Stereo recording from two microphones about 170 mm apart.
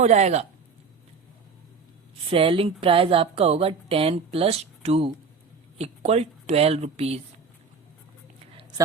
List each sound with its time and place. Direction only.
0.0 s speech: 40° right (ahead or behind)
2.3 s speech: 35° right (ahead or behind)